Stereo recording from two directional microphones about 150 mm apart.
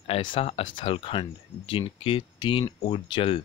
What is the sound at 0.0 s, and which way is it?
Speech, 35° left (ahead or behind).